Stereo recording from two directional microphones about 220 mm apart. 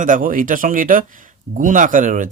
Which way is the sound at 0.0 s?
35° right (ahead or behind).